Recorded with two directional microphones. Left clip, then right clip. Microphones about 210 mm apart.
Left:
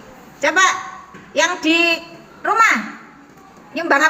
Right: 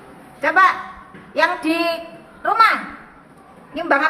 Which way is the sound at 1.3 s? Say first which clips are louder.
Left 1 dB; 10° left (ahead or behind).